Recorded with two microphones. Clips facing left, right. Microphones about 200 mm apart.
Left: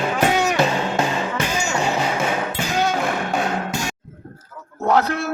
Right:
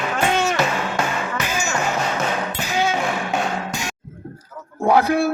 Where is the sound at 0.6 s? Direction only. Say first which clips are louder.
Left 2 dB; 25° left (ahead or behind).